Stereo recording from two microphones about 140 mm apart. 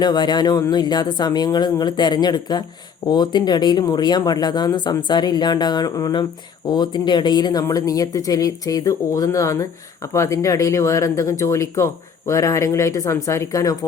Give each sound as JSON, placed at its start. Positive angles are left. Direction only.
{"t": 0.0, "sound": "speech", "side_deg": 30}